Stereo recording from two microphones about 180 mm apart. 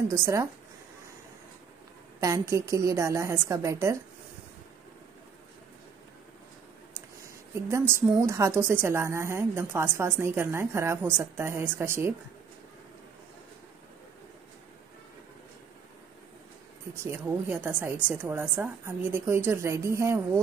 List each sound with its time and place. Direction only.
0.1 s a woman's voice: 15° right (ahead or behind)
2.1 s a woman's voice: 15° right (ahead or behind)
7.9 s a woman's voice: 15° right (ahead or behind)
16.9 s a woman's voice: 10° right (ahead or behind)